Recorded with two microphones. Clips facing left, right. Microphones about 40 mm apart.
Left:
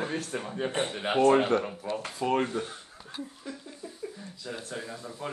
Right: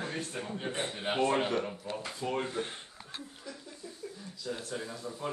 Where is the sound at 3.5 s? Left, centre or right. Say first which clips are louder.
Left 2 dB; left.